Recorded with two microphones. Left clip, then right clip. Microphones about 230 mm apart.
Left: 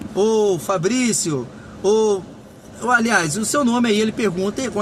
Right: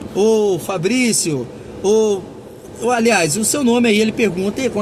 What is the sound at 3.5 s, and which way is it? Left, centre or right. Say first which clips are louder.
Speech: right 2 dB; centre.